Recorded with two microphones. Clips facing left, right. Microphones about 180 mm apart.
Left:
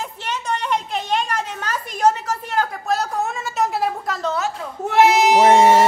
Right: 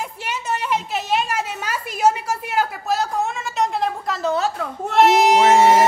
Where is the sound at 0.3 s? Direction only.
5° right (ahead or behind).